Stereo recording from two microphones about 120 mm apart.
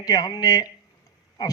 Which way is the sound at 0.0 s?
35° left (ahead or behind).